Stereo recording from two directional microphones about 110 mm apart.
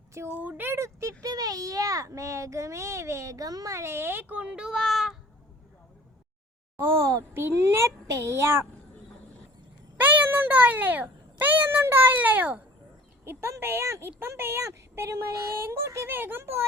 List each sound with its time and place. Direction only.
0.3 s a child's voice: 15° right (ahead or behind)
6.7 s a child's voice: 25° right (ahead or behind)
10.0 s a child's voice: 15° right (ahead or behind)